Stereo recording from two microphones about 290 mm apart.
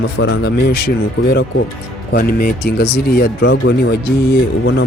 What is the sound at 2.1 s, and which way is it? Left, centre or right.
Speech, left.